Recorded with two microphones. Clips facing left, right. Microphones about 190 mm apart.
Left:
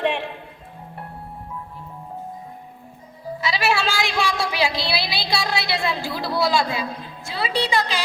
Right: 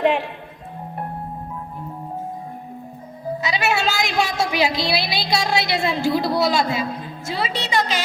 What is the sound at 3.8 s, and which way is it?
Speech, 45° right (ahead or behind).